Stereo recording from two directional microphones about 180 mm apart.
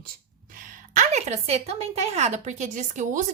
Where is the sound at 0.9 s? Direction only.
40° right (ahead or behind).